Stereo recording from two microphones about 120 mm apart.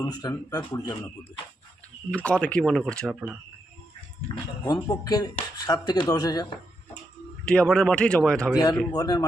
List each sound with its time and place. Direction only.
0.0 s speech: 30° left (ahead or behind)
2.0 s a man's voice: 10° left (ahead or behind)
4.6 s speech: 30° left (ahead or behind)
7.4 s a man's voice: 10° left (ahead or behind)
8.9 s speech: 35° left (ahead or behind)